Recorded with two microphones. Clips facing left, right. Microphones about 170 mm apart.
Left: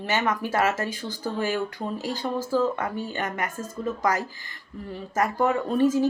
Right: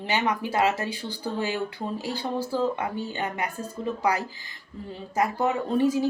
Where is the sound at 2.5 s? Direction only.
15° right (ahead or behind).